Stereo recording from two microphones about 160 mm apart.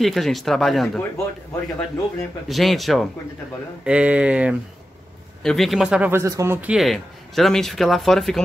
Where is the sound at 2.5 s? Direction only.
Centre (ahead or behind).